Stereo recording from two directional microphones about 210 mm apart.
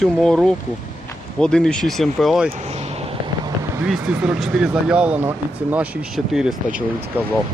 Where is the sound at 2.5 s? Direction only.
30° right (ahead or behind).